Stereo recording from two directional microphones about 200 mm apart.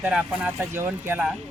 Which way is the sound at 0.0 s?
5° right (ahead or behind).